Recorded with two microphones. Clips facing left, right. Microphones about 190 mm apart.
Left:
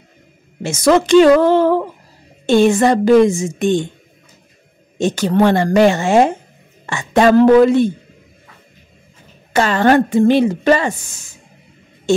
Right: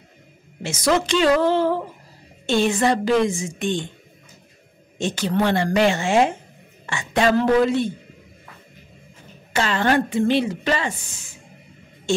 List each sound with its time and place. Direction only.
0.6 s speech: 50° left (ahead or behind)
2.4 s speech: 45° left (ahead or behind)
4.9 s a woman's voice: 45° left (ahead or behind)
9.5 s speech: 45° left (ahead or behind)